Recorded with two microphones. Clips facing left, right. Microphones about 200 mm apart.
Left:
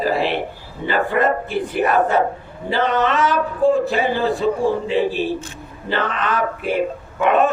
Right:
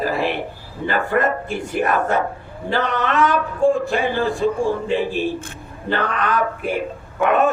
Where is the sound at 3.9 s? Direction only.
50° right (ahead or behind).